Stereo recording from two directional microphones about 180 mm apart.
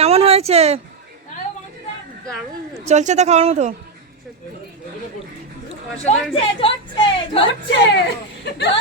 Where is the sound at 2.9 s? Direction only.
40° right (ahead or behind).